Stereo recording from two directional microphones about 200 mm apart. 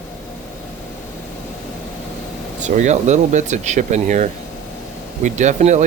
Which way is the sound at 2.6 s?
35° right (ahead or behind).